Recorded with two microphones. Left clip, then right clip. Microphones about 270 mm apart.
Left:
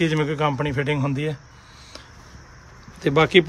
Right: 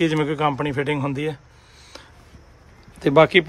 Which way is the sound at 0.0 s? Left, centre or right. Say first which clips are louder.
Right 1 dB; centre.